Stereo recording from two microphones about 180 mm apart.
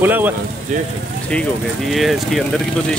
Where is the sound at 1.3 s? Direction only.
5° left (ahead or behind).